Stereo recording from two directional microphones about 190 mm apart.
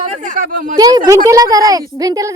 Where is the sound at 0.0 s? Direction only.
45° right (ahead or behind).